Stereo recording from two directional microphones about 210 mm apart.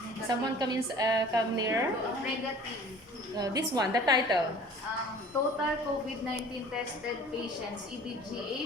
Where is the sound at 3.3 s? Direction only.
15° right (ahead or behind).